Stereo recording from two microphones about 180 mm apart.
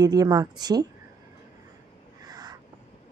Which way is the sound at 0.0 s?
20° right (ahead or behind).